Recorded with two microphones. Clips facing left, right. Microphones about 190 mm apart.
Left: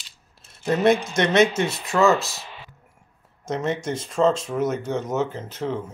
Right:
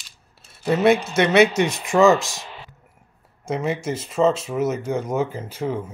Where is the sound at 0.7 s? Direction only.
5° right (ahead or behind).